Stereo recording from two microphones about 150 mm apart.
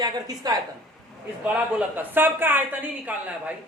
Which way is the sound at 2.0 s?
15° right (ahead or behind).